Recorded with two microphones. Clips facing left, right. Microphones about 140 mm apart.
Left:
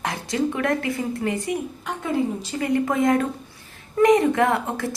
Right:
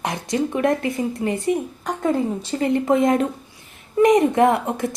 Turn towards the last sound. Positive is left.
turn(degrees=-20)  # may be behind; listen again after turning